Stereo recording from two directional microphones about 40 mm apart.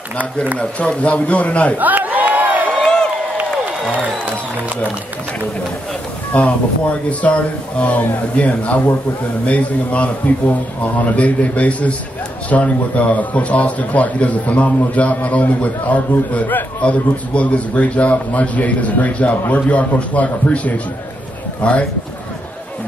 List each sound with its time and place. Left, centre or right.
0.2 s speech: right
0.6 s a man's voice: left
1.8 s crowd: right
6.3 s a man's voice: left
16.8 s a man's voice: left